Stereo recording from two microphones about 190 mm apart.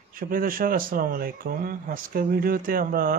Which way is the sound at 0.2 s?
50° right (ahead or behind).